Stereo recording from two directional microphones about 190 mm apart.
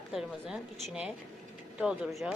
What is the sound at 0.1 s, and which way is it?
A woman's voice, centre (ahead or behind).